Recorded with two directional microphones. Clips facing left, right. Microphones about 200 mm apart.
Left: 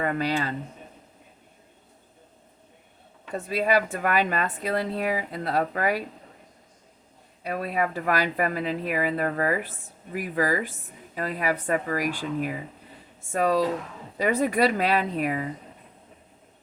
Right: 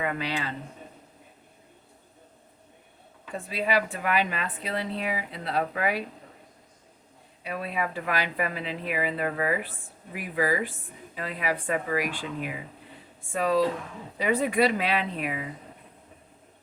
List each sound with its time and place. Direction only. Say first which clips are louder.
0.0 s speech: left 4 dB; 40° left (ahead or behind)
3.3 s speech: left 3 dB; 45° left (ahead or behind)
7.4 s speech: left 4 dB; 45° left (ahead or behind)